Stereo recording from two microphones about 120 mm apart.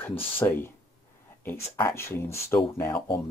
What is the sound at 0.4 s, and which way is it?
Speech, 15° left (ahead or behind).